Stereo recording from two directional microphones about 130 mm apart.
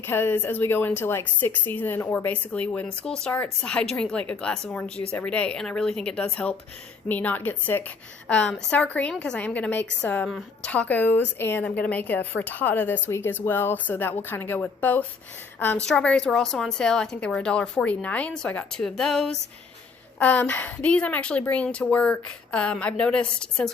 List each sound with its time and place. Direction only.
0.0 s a woman's voice: 15° left (ahead or behind)
10.2 s a woman's voice: centre (ahead or behind)
10.7 s a woman's voice: 10° left (ahead or behind)